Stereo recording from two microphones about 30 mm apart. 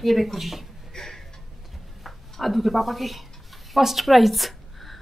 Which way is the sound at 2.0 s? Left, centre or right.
Centre.